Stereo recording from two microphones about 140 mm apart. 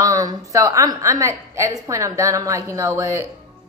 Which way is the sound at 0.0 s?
25° right (ahead or behind).